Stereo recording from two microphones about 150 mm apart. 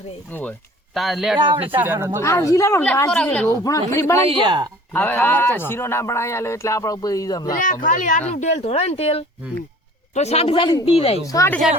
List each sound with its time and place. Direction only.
0.3 s speech: 10° left (ahead or behind)
0.9 s speech: centre (ahead or behind)
1.4 s speech: 35° right (ahead or behind)
1.7 s speech: 15° right (ahead or behind)
2.2 s speech: 20° left (ahead or behind)
3.5 s speech: 25° left (ahead or behind)
4.2 s speech: 35° right (ahead or behind)
4.9 s speech: 15° left (ahead or behind)
7.4 s speech: 65° left (ahead or behind); by 11.2 s 40° left (ahead or behind)
11.3 s speech: 20° left (ahead or behind)